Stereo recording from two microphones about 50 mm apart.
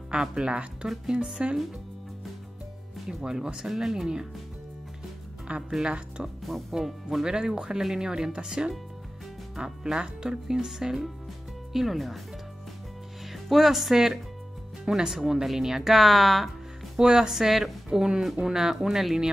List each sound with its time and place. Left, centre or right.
0.1 s speech: centre
3.1 s speech: centre
5.7 s speech: centre
6.7 s a woman's voice: centre
13.3 s speech: centre
17.0 s speech: centre
17.3 s a woman's voice: centre